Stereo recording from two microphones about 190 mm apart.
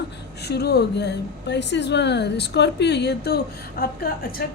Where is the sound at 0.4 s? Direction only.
60° left (ahead or behind).